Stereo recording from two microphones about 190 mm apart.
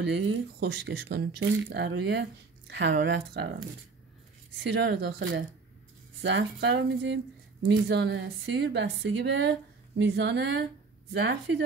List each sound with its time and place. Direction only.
0.0 s a woman's voice: 65° right (ahead or behind)
4.6 s a woman's voice: 70° right (ahead or behind)